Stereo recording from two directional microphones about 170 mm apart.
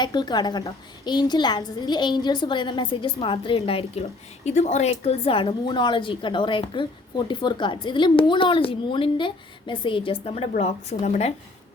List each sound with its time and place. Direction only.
0.0 s a woman's voice: 25° left (ahead or behind)